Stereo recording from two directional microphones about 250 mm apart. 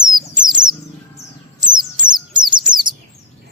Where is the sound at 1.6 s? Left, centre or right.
Centre.